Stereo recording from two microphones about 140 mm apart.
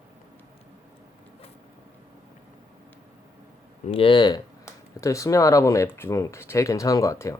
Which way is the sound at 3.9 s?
40° left (ahead or behind).